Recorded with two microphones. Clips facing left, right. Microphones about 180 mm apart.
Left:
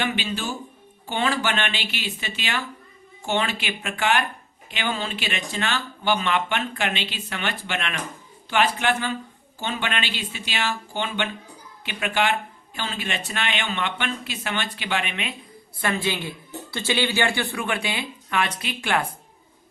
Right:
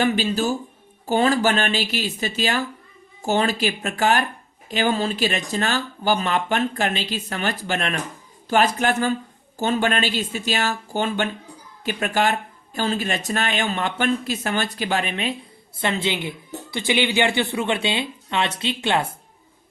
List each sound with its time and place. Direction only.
0.0 s speech: 40° right (ahead or behind)
15.8 s a woman's voice: 20° right (ahead or behind)